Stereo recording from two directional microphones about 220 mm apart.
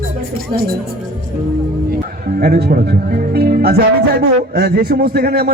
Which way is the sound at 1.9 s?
45° right (ahead or behind).